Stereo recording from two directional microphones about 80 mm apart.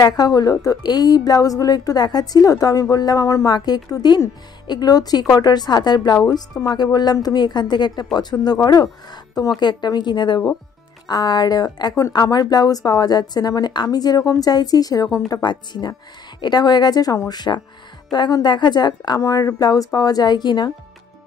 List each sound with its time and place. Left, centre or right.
0.0 s a woman's voice: left
3.5 s a woman's voice: left
6.2 s a woman's voice: left
11.1 s a woman's voice: left
15.4 s a woman's voice: left
19.2 s a woman's voice: left